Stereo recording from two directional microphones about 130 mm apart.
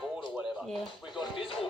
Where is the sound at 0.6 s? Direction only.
Centre (ahead or behind).